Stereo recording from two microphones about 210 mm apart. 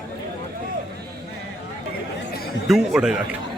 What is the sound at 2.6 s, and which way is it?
Speech, centre (ahead or behind).